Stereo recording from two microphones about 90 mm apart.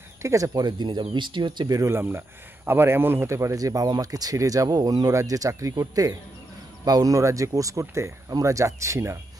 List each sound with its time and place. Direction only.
0.2 s speech: 40° right (ahead or behind); by 1.8 s 60° right (ahead or behind)
1.8 s speech: 25° right (ahead or behind)